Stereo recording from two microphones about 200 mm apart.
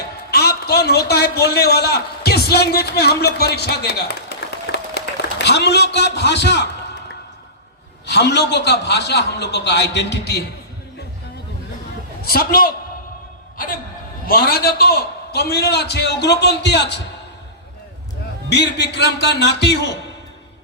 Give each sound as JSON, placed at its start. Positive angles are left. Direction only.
{"t": 0.3, "sound": "a man's voice", "side_deg": 50}
{"t": 8.0, "sound": "a man's voice", "side_deg": 60}
{"t": 12.2, "sound": "a man's voice", "side_deg": 50}
{"t": 14.3, "sound": "a man's voice", "side_deg": 50}
{"t": 18.4, "sound": "a man's voice", "side_deg": 55}